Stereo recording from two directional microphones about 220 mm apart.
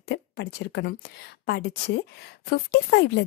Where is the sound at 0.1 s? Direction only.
50° left (ahead or behind).